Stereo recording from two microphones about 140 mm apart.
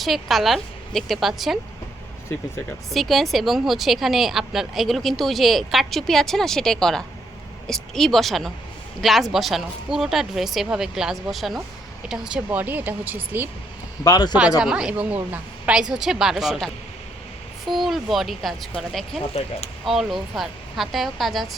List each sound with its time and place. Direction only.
0.0 s a woman's voice: centre (ahead or behind)
2.9 s a woman's voice: centre (ahead or behind)
14.0 s speech: 30° left (ahead or behind)
14.6 s a woman's voice: 5° right (ahead or behind)
19.3 s speech: 45° left (ahead or behind)
19.8 s a woman's voice: centre (ahead or behind)